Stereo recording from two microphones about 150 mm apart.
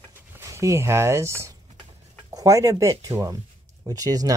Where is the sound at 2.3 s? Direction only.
20° right (ahead or behind).